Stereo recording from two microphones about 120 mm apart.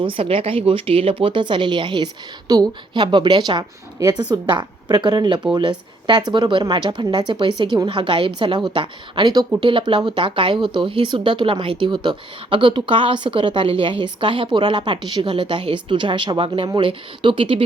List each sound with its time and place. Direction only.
0.0 s speech: 50° right (ahead or behind)